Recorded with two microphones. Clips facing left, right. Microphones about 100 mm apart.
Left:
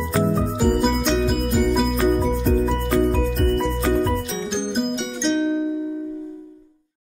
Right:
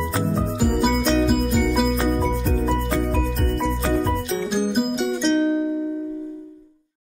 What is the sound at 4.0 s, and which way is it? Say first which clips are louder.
Music: even; 5° right (ahead or behind).